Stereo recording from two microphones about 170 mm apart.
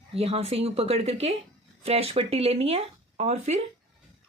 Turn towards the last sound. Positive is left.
turn(degrees=-40)  # may be behind; listen again after turning